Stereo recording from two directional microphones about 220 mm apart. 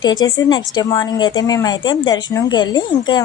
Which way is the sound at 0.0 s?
20° left (ahead or behind).